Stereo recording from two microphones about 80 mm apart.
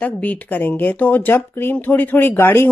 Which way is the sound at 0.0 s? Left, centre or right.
Centre.